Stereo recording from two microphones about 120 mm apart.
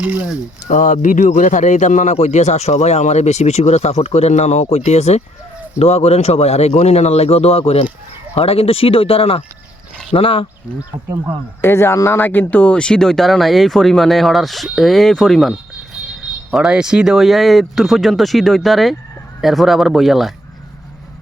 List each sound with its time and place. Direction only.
0.0 s speech: 15° right (ahead or behind)
0.7 s a man's voice: 90° left; by 10.4 s 50° left (ahead or behind)
10.9 s speech: 30° right (ahead or behind)
11.6 s speech: 20° left (ahead or behind); by 20.3 s centre (ahead or behind)